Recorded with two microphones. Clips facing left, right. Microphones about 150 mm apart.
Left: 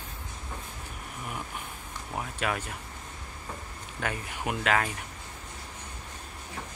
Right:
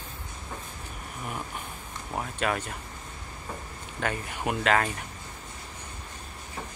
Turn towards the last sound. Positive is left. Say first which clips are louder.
# right 2 dB
turn(degrees=5)  # may be behind; listen again after turning